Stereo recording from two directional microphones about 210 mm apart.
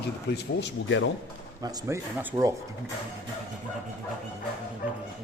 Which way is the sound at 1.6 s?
15° right (ahead or behind).